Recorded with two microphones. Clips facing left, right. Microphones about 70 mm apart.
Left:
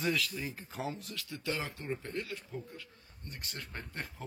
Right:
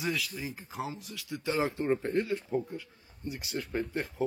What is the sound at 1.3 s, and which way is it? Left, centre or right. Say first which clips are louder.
Speech: right 7 dB; right.